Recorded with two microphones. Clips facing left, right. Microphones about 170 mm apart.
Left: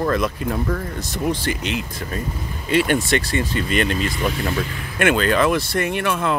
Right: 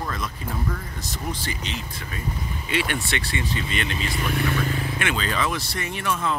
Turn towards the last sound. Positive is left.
turn(degrees=65)  # may be behind; listen again after turning